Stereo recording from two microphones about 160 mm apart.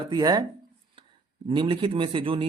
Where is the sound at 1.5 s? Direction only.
30° right (ahead or behind).